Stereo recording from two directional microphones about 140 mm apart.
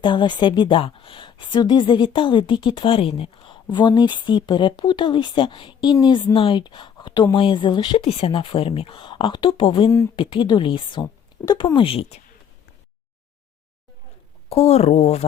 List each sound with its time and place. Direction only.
0.0 s speech: 35° left (ahead or behind)
14.5 s speech: 50° left (ahead or behind)